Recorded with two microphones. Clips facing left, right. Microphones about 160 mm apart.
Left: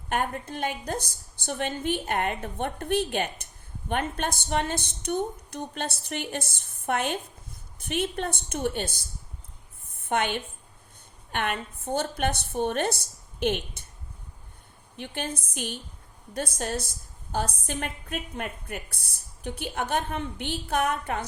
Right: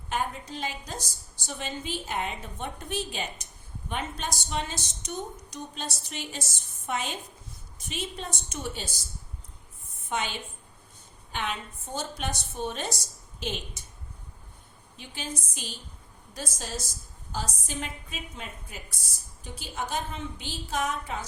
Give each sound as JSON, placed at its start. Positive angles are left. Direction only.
{"t": 0.1, "sound": "a woman's voice", "side_deg": 60}
{"t": 9.9, "sound": "a sound", "side_deg": 55}
{"t": 11.3, "sound": "a woman's voice", "side_deg": 60}
{"t": 14.9, "sound": "a woman's voice", "side_deg": 60}